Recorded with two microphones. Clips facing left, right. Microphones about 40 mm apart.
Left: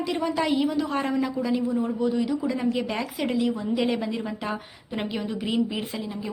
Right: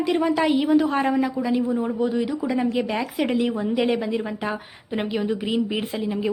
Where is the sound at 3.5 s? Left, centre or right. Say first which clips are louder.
Right 3 dB; right.